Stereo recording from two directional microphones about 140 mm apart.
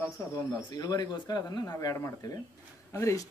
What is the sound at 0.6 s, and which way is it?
Speech, 30° left (ahead or behind).